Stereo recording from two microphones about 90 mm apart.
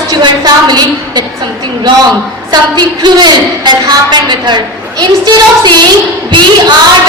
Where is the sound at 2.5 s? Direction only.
55° right (ahead or behind).